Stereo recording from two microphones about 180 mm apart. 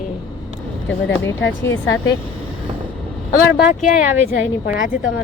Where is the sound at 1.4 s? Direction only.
90° left.